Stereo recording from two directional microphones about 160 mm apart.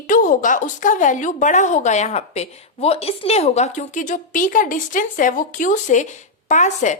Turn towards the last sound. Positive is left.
turn(degrees=50)  # may be behind; listen again after turning